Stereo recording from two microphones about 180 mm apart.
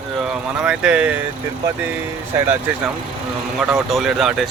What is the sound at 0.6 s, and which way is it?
Speech, 5° right (ahead or behind).